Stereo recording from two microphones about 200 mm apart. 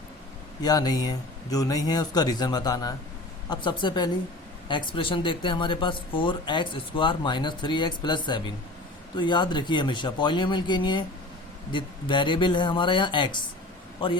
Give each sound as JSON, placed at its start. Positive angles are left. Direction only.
{"t": 0.6, "sound": "speech", "side_deg": 20}